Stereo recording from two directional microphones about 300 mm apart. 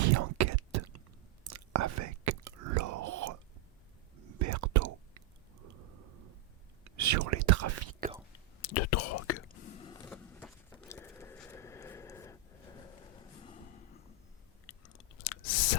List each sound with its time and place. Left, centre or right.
0.0 s whispering: right
4.4 s whispering: right
6.8 s whispering: right
8.6 s whispering: left
9.8 s a sound: centre
14.8 s chewing: left